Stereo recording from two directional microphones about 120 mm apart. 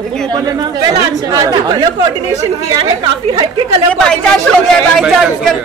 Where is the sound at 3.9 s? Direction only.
5° left (ahead or behind).